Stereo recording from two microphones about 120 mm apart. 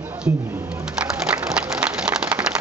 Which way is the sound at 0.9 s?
10° right (ahead or behind).